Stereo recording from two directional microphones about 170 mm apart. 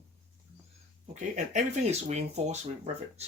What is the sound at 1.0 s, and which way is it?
Speech, 45° right (ahead or behind).